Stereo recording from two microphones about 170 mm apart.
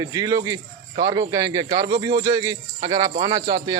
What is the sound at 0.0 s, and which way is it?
Speech, 20° right (ahead or behind).